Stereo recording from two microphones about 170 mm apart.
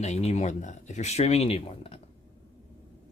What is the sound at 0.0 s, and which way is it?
Speech, 40° left (ahead or behind).